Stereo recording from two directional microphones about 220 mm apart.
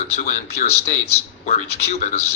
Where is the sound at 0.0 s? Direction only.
35° left (ahead or behind).